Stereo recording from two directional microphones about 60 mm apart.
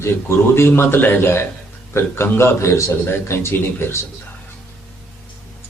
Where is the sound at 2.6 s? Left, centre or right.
Left.